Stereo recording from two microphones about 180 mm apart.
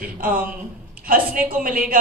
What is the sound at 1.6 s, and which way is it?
Speech, 50° right (ahead or behind).